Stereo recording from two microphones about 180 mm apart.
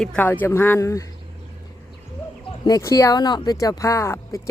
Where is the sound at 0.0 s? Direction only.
5° left (ahead or behind).